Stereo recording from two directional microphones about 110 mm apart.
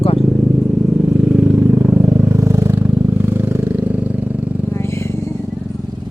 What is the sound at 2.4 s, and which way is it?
Vehicle, 25° right (ahead or behind).